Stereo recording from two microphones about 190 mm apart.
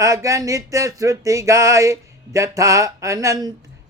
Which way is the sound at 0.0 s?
15° right (ahead or behind).